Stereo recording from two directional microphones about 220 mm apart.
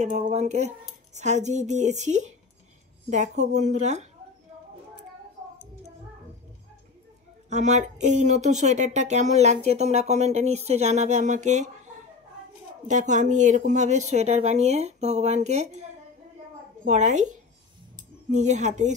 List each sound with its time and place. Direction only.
0.0 s speech: 30° right (ahead or behind)
7.4 s speech: 30° right (ahead or behind)